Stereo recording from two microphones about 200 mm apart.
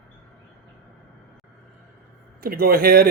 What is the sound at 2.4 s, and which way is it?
Speech, 45° right (ahead or behind).